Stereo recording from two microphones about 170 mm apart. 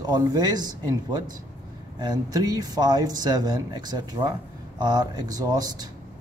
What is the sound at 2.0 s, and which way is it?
A man's voice, 25° right (ahead or behind).